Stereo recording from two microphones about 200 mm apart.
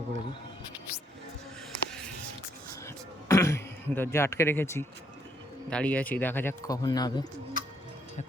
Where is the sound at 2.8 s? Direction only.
15° left (ahead or behind).